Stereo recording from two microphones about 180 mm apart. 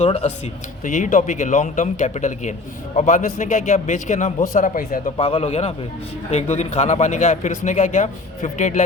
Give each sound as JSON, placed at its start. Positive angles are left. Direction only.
{"t": 0.0, "sound": "a man's voice", "side_deg": 35}
{"t": 5.1, "sound": "a man's voice", "side_deg": 30}